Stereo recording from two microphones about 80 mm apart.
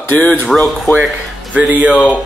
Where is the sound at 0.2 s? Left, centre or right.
Left.